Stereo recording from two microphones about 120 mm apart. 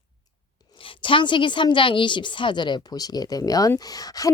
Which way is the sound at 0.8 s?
45° left (ahead or behind).